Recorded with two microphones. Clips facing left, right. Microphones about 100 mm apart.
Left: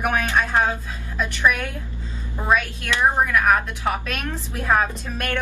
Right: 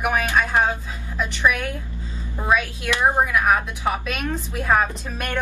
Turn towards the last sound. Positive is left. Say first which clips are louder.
# left 1 dB
turn(degrees=-5)  # may be behind; listen again after turning